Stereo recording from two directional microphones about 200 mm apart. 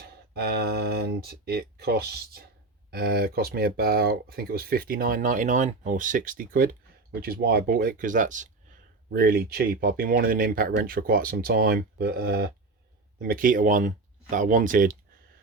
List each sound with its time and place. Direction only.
0.3 s speech: 50° right (ahead or behind)